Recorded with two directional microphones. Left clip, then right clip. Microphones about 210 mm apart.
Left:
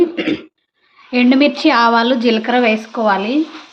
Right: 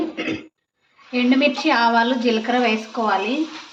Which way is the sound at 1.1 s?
55° left (ahead or behind).